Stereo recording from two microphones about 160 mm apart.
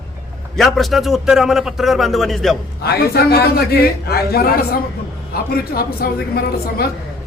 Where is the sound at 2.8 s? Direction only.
75° left (ahead or behind).